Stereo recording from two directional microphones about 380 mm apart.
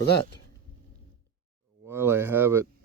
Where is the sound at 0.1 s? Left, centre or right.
Left.